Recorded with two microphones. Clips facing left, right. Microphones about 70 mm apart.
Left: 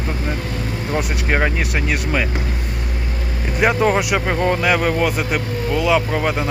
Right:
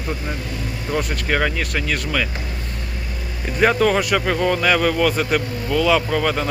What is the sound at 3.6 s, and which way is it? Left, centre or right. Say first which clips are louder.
Speech: even; centre.